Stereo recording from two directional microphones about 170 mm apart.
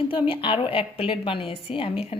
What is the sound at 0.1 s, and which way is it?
Speech, 30° left (ahead or behind).